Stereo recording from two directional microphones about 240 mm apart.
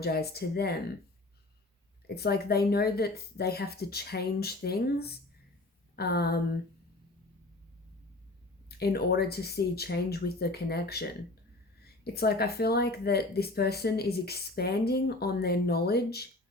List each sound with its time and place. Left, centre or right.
0.0 s speech: left
2.0 s speech: left
8.8 s speech: left